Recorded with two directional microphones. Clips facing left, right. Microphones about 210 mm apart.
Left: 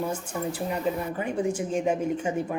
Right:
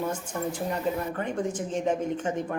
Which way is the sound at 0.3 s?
5° left (ahead or behind).